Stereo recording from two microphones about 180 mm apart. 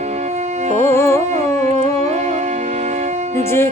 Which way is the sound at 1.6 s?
40° right (ahead or behind).